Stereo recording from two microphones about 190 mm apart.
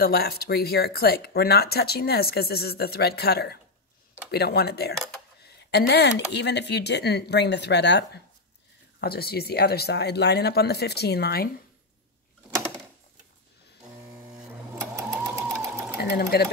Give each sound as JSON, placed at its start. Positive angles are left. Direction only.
{"t": 0.0, "sound": "speech", "side_deg": 55}
{"t": 14.1, "sound": "a sound", "side_deg": -5}
{"t": 15.0, "sound": "sewing machine", "side_deg": -15}
{"t": 16.0, "sound": "speech", "side_deg": 55}